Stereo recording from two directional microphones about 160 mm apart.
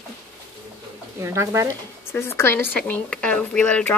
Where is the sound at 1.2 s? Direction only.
20° right (ahead or behind).